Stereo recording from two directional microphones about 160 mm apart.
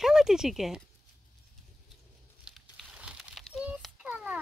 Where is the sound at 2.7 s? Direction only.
5° right (ahead or behind).